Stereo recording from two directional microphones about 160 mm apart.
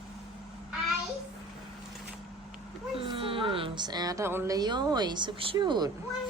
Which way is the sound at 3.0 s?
35° right (ahead or behind).